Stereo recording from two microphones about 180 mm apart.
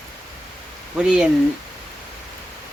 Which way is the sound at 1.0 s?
5° right (ahead or behind).